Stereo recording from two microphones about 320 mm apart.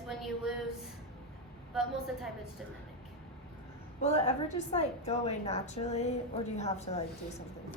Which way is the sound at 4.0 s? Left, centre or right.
Centre.